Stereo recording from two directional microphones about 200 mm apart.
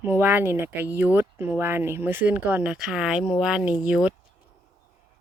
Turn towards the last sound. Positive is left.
turn(degrees=-5)  # may be behind; listen again after turning